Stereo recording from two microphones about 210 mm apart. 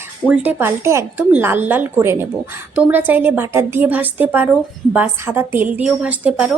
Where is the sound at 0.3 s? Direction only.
10° right (ahead or behind).